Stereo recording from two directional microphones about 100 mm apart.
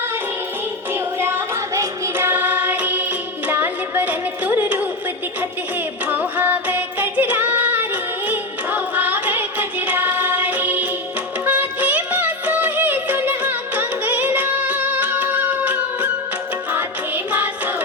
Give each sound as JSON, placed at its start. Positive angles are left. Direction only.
{"t": 0.9, "sound": "music", "side_deg": -25}
{"t": 6.1, "sound": "music", "side_deg": -20}
{"t": 17.3, "sound": "carnatic music", "side_deg": -20}